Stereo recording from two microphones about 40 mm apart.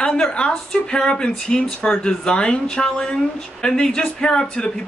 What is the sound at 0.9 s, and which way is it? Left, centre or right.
Speech, left.